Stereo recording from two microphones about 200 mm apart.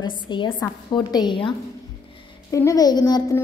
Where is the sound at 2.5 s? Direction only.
15° left (ahead or behind).